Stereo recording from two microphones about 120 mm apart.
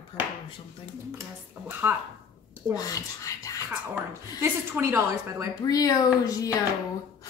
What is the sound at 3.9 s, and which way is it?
Speech, 20° right (ahead or behind).